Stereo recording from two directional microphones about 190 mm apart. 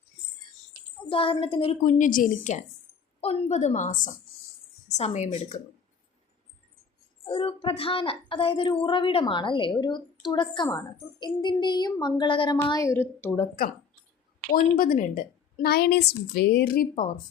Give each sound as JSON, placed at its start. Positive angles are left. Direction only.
{"t": 1.0, "sound": "speech", "side_deg": 30}
{"t": 1.8, "sound": "a woman's voice", "side_deg": 45}
{"t": 7.3, "sound": "a woman's voice", "side_deg": 30}
{"t": 14.5, "sound": "a woman's voice", "side_deg": 50}